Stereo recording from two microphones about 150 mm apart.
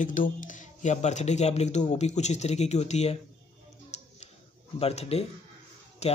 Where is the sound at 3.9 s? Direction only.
50° left (ahead or behind).